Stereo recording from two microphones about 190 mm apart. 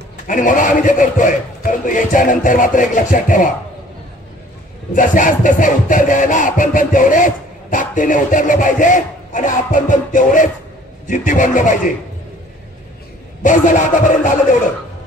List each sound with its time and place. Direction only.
0.3 s music: 45° left (ahead or behind)
4.9 s music: 45° left (ahead or behind)
13.4 s music: 40° left (ahead or behind)